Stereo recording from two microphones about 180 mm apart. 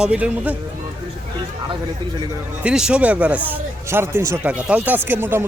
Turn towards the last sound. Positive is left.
turn(degrees=-10)  # may be behind; listen again after turning